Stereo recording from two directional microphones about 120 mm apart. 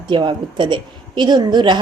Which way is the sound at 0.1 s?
40° right (ahead or behind).